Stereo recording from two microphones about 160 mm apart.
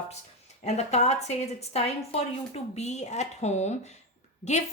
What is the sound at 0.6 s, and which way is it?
A woman's voice, 45° left (ahead or behind).